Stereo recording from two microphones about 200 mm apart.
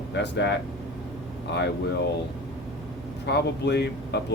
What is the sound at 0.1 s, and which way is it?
Speech, 60° left (ahead or behind).